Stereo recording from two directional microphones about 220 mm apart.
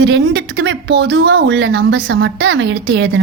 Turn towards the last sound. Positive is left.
turn(degrees=-55)  # may be behind; listen again after turning